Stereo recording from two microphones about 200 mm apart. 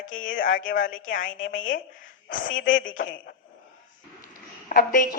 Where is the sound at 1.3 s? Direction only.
75° left (ahead or behind).